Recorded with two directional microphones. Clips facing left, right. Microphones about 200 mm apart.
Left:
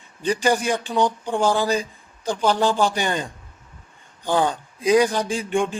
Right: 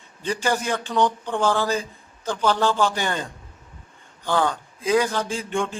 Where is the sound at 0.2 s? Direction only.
15° left (ahead or behind).